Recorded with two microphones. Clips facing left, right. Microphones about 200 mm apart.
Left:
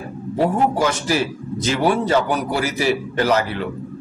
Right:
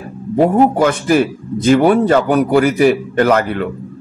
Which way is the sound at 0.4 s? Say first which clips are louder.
Right 7 dB; 55° right (ahead or behind).